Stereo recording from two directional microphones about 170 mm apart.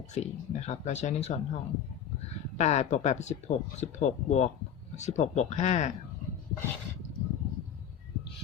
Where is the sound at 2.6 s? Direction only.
40° left (ahead or behind).